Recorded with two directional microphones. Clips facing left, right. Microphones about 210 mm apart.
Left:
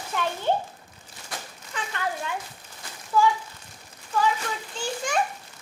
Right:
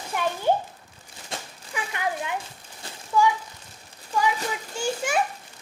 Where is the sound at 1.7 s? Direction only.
15° right (ahead or behind).